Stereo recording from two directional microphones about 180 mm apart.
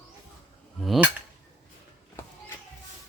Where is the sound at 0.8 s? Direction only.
Centre (ahead or behind).